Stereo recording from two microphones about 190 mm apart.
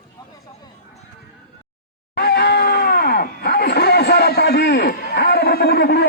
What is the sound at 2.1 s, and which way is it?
Screaming, 60° left (ahead or behind).